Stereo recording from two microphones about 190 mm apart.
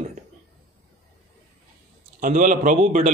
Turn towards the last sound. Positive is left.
turn(degrees=-40)  # may be behind; listen again after turning